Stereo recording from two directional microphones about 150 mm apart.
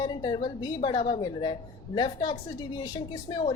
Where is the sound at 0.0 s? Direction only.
30° left (ahead or behind).